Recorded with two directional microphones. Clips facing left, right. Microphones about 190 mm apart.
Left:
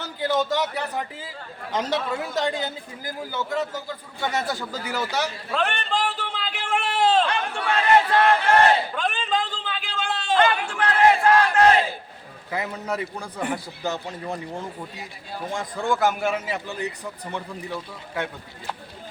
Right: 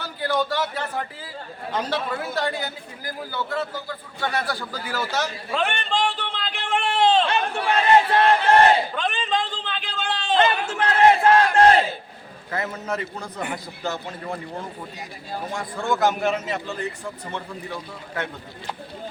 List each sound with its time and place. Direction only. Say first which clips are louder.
0.0 s a man's voice: left 1 dB; 20° left (ahead or behind)
5.5 s a sound: right 1 dB; centre (ahead or behind)
7.3 s crowd: right 2 dB; 20° right (ahead or behind)
9.0 s a sound: even; 5° left (ahead or behind)
10.3 s battle cry: even; 25° right (ahead or behind)
12.5 s a man's voice: even; 15° left (ahead or behind)
15.5 s a man's voice: left 1 dB; 15° left (ahead or behind)